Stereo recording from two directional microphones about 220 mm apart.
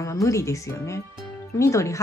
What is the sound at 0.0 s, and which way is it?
Speech, 15° left (ahead or behind).